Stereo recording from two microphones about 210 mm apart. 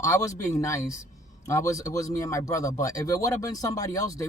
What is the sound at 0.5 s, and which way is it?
Speech, 15° left (ahead or behind).